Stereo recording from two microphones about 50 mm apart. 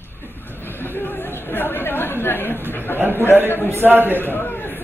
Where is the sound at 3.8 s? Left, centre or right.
Right.